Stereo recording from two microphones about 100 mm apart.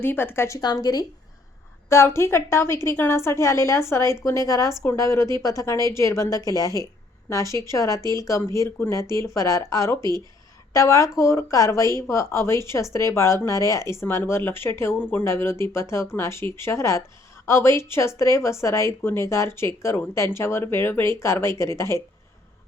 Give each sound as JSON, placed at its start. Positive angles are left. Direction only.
{"t": 0.0, "sound": "a woman's voice", "side_deg": 20}
{"t": 0.6, "sound": "a woman's voice", "side_deg": 40}
{"t": 1.9, "sound": "a woman's voice", "side_deg": 25}